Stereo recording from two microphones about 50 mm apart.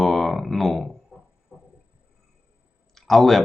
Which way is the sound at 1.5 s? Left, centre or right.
Right.